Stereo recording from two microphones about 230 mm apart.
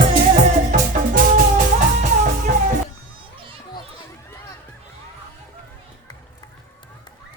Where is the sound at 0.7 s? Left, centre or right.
Right.